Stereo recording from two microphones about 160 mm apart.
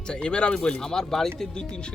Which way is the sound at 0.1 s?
5° left (ahead or behind).